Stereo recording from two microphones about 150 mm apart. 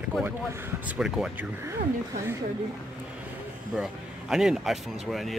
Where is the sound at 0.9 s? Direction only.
5° right (ahead or behind).